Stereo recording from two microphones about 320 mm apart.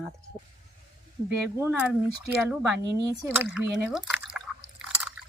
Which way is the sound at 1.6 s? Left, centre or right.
Centre.